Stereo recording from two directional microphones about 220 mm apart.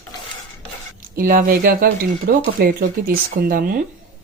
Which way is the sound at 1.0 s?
40° right (ahead or behind).